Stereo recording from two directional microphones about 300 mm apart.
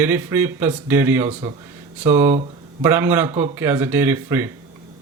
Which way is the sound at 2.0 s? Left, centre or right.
Centre.